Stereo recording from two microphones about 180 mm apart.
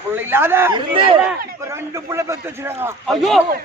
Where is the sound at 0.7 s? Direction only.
30° right (ahead or behind).